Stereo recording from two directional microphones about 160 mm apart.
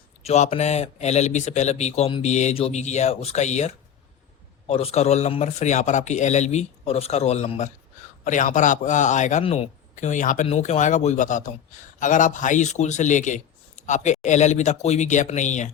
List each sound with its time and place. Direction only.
0.2 s a man's voice: 45° left (ahead or behind)
9.4 s a man's voice: 40° left (ahead or behind)